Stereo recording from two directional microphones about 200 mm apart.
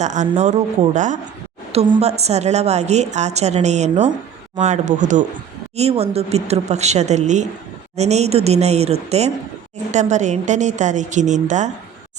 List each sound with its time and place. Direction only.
0.0 s a woman's voice: 35° right (ahead or behind)